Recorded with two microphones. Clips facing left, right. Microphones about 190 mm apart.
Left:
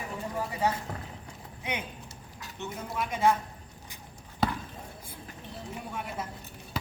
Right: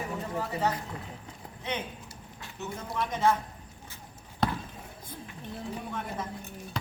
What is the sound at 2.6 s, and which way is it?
Speech, 5° left (ahead or behind).